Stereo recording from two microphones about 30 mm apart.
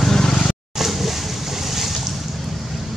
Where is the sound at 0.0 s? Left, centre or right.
Centre.